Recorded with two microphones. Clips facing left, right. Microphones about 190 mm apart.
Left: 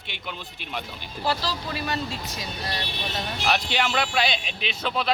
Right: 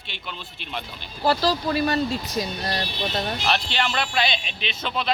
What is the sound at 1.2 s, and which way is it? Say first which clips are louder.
Speech: right 6 dB; 40° right (ahead or behind).